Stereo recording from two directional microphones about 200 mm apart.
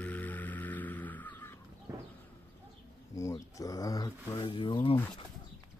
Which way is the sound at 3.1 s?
15° left (ahead or behind).